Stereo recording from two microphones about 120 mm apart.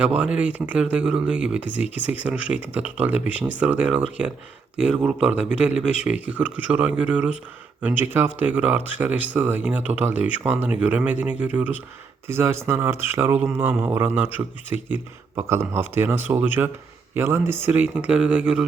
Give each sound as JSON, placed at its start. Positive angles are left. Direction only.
{"t": 0.0, "sound": "speech", "side_deg": -10}